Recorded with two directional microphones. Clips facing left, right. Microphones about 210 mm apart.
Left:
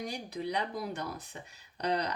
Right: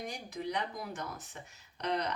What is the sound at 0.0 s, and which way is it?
Speech, 35° left (ahead or behind).